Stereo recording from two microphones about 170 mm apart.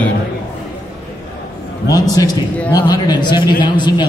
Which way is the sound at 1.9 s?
20° left (ahead or behind).